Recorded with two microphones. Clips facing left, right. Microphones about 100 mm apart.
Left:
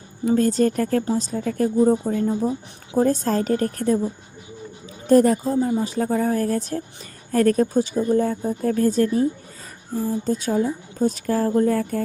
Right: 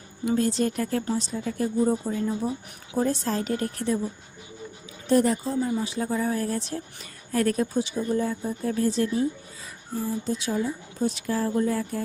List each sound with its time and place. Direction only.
0.3 s a woman's voice: 45° left (ahead or behind)
5.0 s a woman's voice: 45° left (ahead or behind)